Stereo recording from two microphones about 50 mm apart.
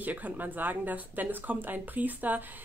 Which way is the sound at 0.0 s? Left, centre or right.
Right.